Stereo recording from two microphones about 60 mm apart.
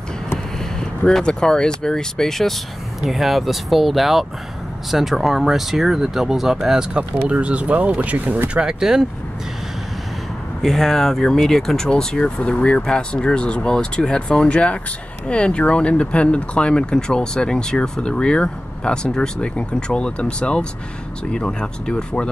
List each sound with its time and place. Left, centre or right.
0.7 s speech: centre
10.6 s speech: centre